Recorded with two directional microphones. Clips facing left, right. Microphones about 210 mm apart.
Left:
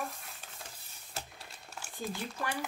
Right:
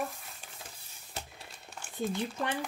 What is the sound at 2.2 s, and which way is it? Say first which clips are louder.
Speech: right 4 dB; 20° right (ahead or behind).